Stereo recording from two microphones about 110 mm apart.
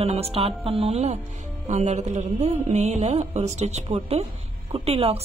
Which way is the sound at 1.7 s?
90° right.